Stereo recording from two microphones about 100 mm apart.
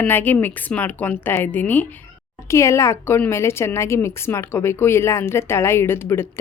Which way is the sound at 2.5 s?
30° left (ahead or behind).